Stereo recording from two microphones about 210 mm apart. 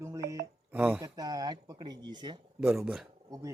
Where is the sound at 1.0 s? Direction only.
15° right (ahead or behind).